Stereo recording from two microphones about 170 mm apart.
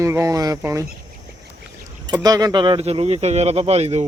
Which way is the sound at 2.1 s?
20° right (ahead or behind).